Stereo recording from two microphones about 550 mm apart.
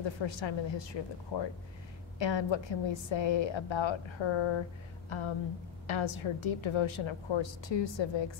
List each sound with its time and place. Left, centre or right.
0.0 s a woman's voice: left